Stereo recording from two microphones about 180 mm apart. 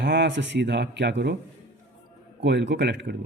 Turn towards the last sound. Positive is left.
turn(degrees=-75)  # may be behind; listen again after turning